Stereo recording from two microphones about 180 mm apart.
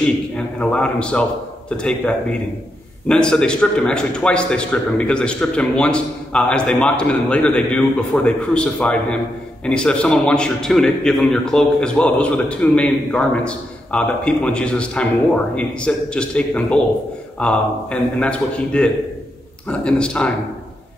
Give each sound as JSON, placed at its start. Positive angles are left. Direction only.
{"t": 0.6, "sound": "a man's voice", "side_deg": 5}